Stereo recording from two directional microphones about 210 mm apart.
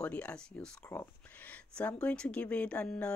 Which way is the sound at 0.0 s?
5° left (ahead or behind).